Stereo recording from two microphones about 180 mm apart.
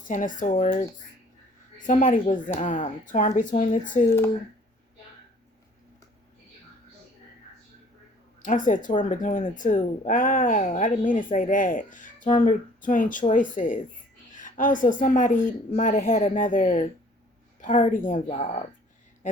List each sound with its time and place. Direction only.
0.1 s speech: 45° left (ahead or behind)
1.9 s speech: 45° left (ahead or behind)
8.4 s speech: 45° left (ahead or behind)